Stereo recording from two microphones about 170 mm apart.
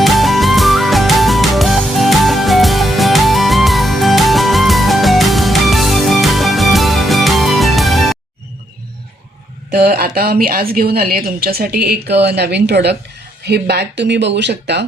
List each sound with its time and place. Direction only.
0.0 s music: centre (ahead or behind)
9.7 s a woman's voice: 65° right (ahead or behind); by 14.8 s 90° right